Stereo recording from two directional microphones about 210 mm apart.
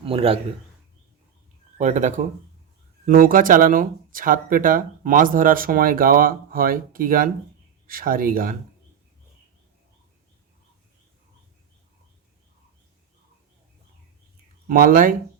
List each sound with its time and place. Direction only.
0.0 s a man's voice: 25° right (ahead or behind)
1.8 s speech: 35° right (ahead or behind)
14.7 s speech: 45° right (ahead or behind)